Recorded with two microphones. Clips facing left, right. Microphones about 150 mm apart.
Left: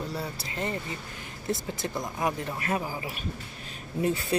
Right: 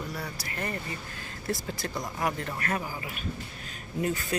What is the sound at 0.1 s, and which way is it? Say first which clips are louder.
Speech: left 2 dB; 25° left (ahead or behind).